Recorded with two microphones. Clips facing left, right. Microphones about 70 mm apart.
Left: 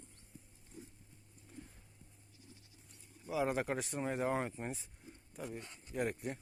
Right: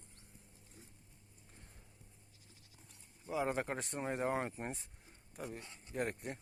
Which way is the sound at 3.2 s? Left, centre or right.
Centre.